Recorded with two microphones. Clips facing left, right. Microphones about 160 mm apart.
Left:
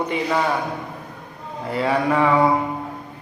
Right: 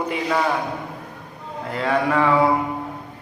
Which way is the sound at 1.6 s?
Centre (ahead or behind).